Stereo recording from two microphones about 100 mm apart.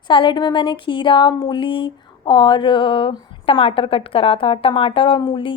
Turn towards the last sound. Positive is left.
turn(degrees=55)  # may be behind; listen again after turning